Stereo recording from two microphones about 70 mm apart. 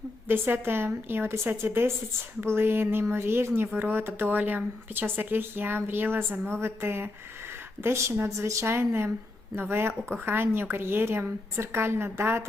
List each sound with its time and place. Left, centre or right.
0.3 s a woman's voice: right